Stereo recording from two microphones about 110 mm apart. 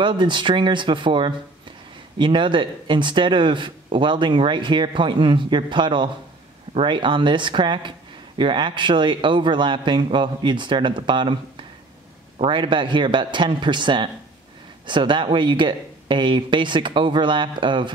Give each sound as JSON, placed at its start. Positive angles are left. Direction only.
{"t": 0.0, "sound": "speech", "side_deg": -45}
{"t": 12.4, "sound": "speech", "side_deg": -50}